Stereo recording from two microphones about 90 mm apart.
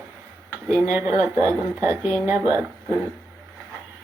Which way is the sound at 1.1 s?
35° right (ahead or behind).